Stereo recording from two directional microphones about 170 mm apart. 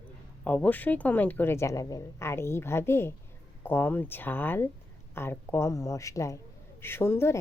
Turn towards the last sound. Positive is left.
turn(degrees=15)  # may be behind; listen again after turning